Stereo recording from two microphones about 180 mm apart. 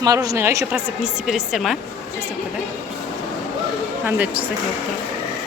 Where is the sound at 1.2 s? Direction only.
Centre (ahead or behind).